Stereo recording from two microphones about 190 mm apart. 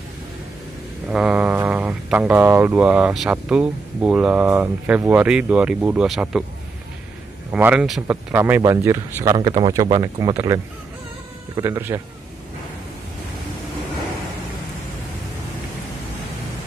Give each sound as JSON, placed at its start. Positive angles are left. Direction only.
{"t": 1.0, "sound": "speech", "side_deg": -5}
{"t": 7.5, "sound": "speech", "side_deg": -5}